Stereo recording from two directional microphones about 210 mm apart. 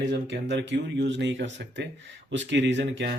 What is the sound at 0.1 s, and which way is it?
Speech, 55° right (ahead or behind).